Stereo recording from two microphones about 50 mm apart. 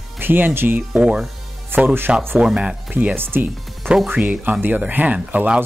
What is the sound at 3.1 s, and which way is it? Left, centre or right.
Speech, right.